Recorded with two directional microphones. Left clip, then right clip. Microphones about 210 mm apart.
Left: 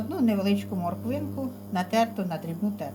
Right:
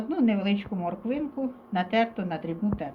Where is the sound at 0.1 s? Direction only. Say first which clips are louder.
Even; 50° left (ahead or behind).